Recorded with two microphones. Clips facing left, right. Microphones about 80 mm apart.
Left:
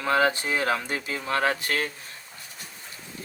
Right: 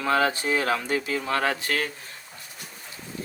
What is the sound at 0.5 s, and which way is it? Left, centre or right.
Speech, left.